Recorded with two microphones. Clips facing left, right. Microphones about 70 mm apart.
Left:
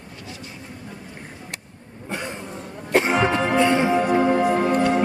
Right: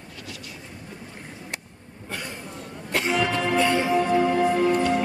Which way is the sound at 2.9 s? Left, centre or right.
Left.